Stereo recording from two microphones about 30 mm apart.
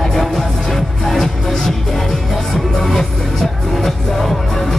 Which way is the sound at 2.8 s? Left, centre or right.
Centre.